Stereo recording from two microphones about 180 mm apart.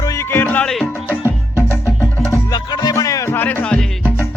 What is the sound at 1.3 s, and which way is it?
Music, 15° left (ahead or behind).